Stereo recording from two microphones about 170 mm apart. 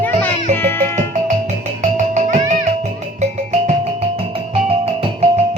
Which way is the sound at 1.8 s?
45° right (ahead or behind).